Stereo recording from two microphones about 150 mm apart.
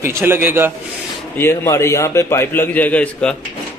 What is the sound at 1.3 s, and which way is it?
A man's voice, 15° left (ahead or behind).